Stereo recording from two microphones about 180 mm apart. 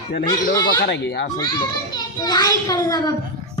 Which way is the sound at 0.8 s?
70° left (ahead or behind).